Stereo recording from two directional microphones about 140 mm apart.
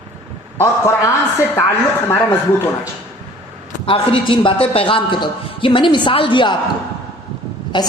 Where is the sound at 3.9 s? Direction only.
40° left (ahead or behind).